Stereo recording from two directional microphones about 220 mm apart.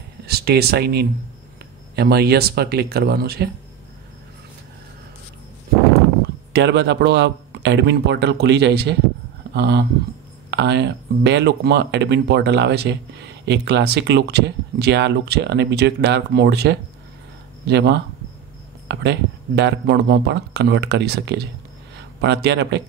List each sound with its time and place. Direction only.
0.3 s speech: 45° right (ahead or behind)
6.5 s speech: 50° right (ahead or behind)